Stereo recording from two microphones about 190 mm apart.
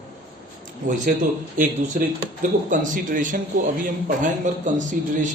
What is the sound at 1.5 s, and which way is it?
A man's voice, 45° right (ahead or behind).